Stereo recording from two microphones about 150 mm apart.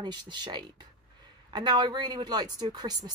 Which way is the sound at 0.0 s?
30° right (ahead or behind).